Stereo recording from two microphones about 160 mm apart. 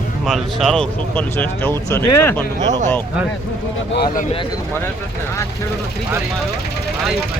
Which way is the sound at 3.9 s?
65° left (ahead or behind).